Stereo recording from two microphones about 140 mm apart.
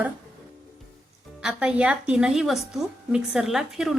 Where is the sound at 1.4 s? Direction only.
5° right (ahead or behind).